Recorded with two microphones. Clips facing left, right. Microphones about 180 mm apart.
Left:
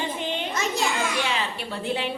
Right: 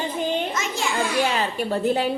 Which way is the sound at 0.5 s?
35° left (ahead or behind).